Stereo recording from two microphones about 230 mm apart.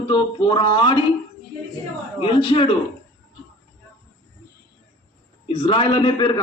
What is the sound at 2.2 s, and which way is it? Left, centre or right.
Speech, left.